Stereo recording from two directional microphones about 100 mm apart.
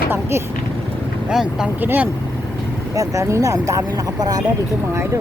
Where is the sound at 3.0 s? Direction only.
30° right (ahead or behind).